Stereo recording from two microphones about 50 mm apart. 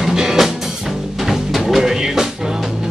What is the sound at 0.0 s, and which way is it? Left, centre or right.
Music, centre.